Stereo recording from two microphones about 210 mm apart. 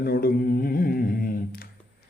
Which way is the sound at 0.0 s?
45° left (ahead or behind).